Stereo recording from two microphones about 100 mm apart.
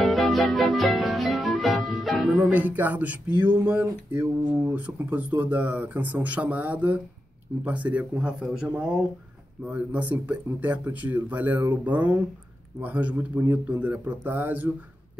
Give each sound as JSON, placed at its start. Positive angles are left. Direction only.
{"t": 0.0, "sound": "music", "side_deg": 0}
{"t": 2.4, "sound": "speech", "side_deg": -15}